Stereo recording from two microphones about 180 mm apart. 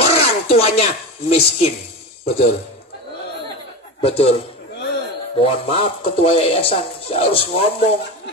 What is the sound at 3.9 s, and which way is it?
Speech, 35° left (ahead or behind).